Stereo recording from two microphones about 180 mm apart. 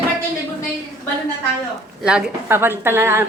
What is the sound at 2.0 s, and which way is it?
A woman's voice, 5° right (ahead or behind).